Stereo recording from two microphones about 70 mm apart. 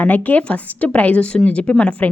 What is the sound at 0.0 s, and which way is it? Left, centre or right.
Speech, left.